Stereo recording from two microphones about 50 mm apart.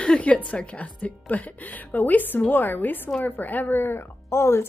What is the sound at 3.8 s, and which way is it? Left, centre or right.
Speech, left.